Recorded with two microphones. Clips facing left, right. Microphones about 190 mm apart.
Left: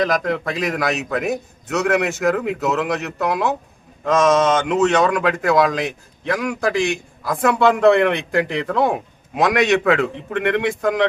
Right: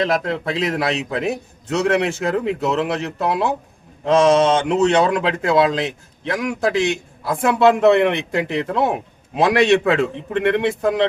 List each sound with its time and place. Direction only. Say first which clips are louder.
0.0 s speech: even; 25° right (ahead or behind)